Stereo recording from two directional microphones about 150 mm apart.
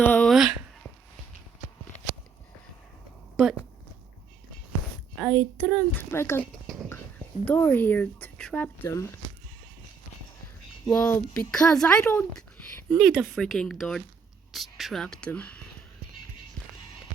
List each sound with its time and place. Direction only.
0.0 s a sound: 10° left (ahead or behind)
3.3 s speech: 5° right (ahead or behind)
5.2 s speech: centre (ahead or behind)
6.0 s speech: 15° left (ahead or behind)
10.9 s speech: 10° left (ahead or behind)